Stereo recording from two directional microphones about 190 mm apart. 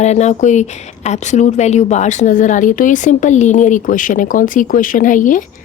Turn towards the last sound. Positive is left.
turn(degrees=45)  # may be behind; listen again after turning